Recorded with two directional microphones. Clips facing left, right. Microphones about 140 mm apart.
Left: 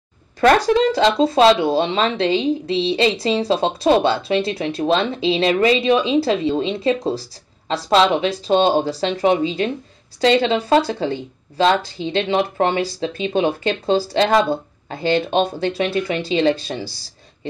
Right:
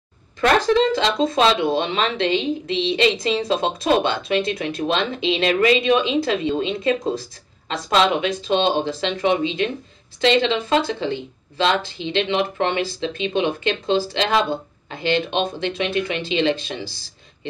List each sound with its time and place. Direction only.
0.7 s speech: 40° left (ahead or behind)